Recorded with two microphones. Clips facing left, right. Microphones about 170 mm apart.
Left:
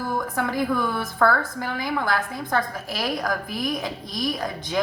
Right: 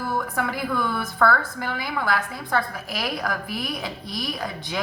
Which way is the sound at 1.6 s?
20° left (ahead or behind).